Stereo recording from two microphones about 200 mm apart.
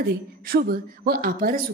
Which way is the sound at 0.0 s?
50° right (ahead or behind).